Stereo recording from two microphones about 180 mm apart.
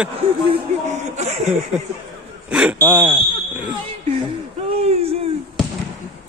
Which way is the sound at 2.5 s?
5° right (ahead or behind).